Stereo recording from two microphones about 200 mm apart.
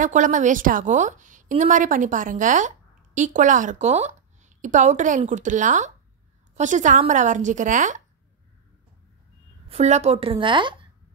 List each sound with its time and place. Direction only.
0.0 s a woman's voice: 40° right (ahead or behind)
9.7 s a woman's voice: 35° right (ahead or behind)